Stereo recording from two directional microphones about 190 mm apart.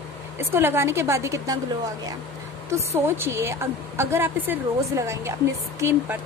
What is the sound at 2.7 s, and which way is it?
A woman's voice, 15° right (ahead or behind).